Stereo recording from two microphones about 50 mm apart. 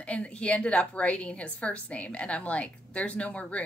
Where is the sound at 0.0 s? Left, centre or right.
Left.